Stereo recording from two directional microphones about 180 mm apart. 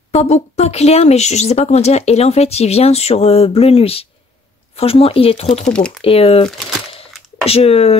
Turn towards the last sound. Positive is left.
turn(degrees=35)  # may be behind; listen again after turning